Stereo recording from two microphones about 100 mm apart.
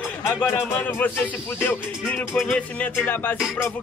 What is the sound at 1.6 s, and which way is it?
Speech, 15° left (ahead or behind).